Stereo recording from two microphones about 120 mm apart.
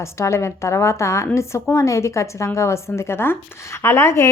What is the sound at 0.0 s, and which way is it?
A woman's voice, 25° left (ahead or behind).